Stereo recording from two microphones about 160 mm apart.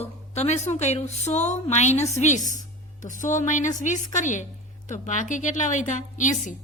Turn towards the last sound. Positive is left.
turn(degrees=50)  # may be behind; listen again after turning